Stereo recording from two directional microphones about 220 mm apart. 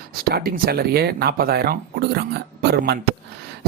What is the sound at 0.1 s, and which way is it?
Speech, 40° right (ahead or behind).